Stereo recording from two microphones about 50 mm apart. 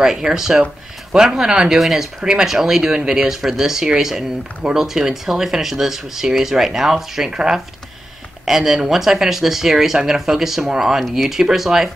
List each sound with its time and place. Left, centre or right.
0.0 s speech: centre
1.8 s speech: centre